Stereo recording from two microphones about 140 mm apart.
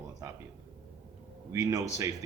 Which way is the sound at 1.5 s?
25° right (ahead or behind).